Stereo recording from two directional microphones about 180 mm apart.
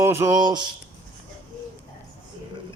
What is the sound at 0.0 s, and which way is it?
Speech, 15° right (ahead or behind).